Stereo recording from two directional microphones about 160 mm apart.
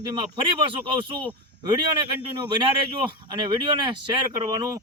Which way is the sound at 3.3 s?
30° right (ahead or behind).